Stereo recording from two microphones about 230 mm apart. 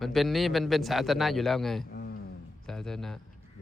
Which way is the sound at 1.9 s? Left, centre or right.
Left.